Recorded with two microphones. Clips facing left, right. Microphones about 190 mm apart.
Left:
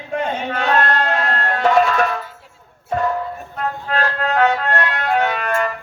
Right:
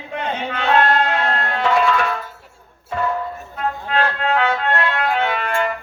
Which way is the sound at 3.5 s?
45° left (ahead or behind).